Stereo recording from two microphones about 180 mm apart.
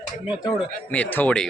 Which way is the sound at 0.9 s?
10° left (ahead or behind).